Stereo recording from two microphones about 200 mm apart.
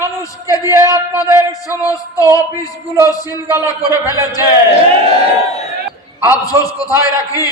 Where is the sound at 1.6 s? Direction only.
15° left (ahead or behind).